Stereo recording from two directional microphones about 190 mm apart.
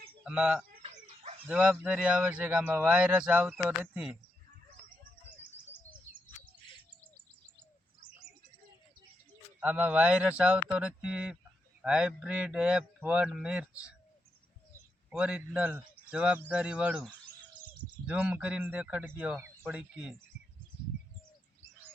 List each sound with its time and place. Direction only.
0.3 s speech: 5° right (ahead or behind)
0.8 s dog: 35° right (ahead or behind)
1.5 s speech: 5° right (ahead or behind)
9.6 s speech: 10° right (ahead or behind)
15.1 s speech: 5° right (ahead or behind)